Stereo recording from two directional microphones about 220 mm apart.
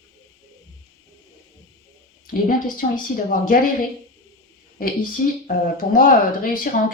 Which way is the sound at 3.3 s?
40° left (ahead or behind).